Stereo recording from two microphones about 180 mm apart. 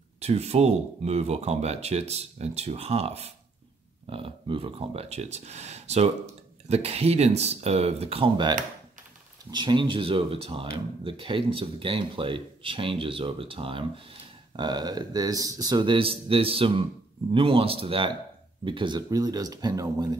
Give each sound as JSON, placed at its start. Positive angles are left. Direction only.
{"t": 0.2, "sound": "speech", "side_deg": -35}